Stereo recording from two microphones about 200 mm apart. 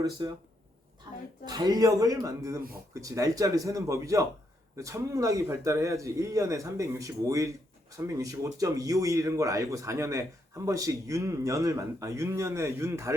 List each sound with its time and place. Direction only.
0.2 s speech: 20° right (ahead or behind)
1.1 s a sound: 20° right (ahead or behind)
1.5 s speech: 20° right (ahead or behind)